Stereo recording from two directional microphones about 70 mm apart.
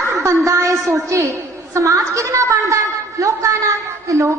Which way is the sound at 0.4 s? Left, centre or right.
Right.